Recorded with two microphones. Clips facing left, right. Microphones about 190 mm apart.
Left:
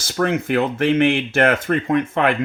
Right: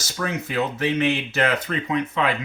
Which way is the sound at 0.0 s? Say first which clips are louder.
Left 8 dB; 60° left (ahead or behind).